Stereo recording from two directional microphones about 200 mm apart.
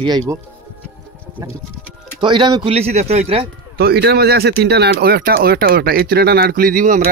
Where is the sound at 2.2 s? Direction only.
25° right (ahead or behind).